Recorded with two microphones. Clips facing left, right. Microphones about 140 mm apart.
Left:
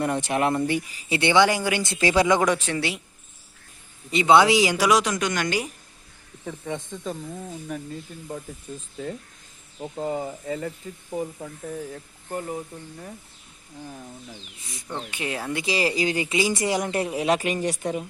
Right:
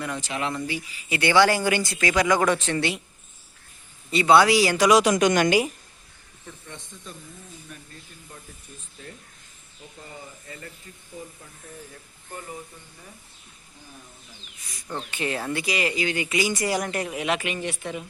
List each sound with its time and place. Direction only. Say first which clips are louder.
0.0 s speech: left 6 dB; 50° left (ahead or behind)
1.1 s a man's voice: even; 25° left (ahead or behind)
1.8 s speech: left 2 dB; 25° left (ahead or behind); by 3.0 s 5° left (ahead or behind)
4.1 s a man's voice: even; 20° left (ahead or behind)
5.0 s speech: right 6 dB; 20° right (ahead or behind)
6.4 s speech: left 11 dB; 90° left
9.8 s speech: left 14 dB; 90° left
14.6 s speech: left 5 dB; 25° left (ahead or behind)
14.9 s a man's voice: right 1 dB; 10° left (ahead or behind)
15.6 s speech: left 5 dB; 30° left (ahead or behind)